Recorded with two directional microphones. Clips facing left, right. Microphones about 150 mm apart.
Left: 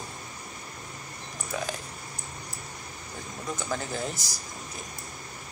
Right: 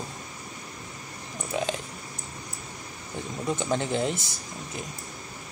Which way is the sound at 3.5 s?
25° right (ahead or behind).